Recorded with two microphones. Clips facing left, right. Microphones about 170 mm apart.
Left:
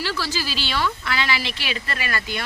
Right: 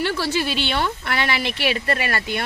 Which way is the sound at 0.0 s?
55° right (ahead or behind).